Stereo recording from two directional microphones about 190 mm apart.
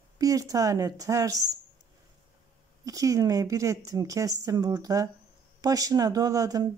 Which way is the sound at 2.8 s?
20° right (ahead or behind).